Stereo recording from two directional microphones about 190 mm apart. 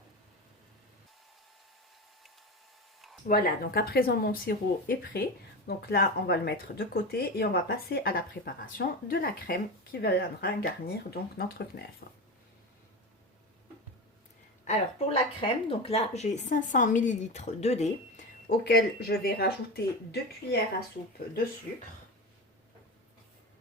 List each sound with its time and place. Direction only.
3.2 s speech: 50° left (ahead or behind)
14.7 s speech: 30° left (ahead or behind)
18.4 s speech: 55° left (ahead or behind)